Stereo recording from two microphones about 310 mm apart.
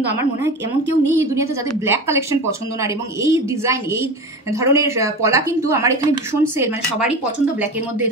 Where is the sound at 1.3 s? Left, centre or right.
Centre.